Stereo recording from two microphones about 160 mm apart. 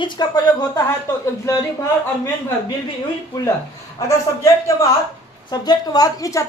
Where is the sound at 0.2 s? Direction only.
25° left (ahead or behind).